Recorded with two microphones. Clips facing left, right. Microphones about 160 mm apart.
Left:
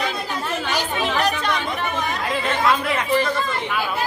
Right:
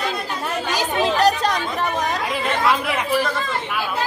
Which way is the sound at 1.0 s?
40° right (ahead or behind).